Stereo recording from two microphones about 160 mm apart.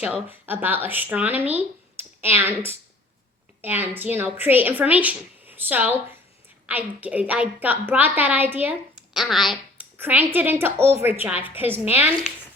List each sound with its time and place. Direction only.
0.0 s a woman's voice: 10° right (ahead or behind)
3.6 s a woman's voice: 10° right (ahead or behind)
10.0 s a woman's voice: 10° right (ahead or behind)